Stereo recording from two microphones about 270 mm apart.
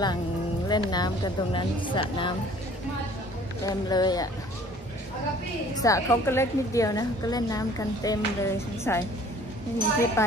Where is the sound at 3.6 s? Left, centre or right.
Centre.